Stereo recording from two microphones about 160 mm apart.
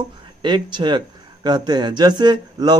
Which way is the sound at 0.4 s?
30° right (ahead or behind).